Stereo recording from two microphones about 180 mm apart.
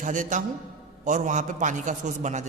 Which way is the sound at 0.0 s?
45° right (ahead or behind).